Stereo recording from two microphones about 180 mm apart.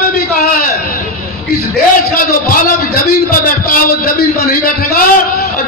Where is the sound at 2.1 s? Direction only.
50° left (ahead or behind).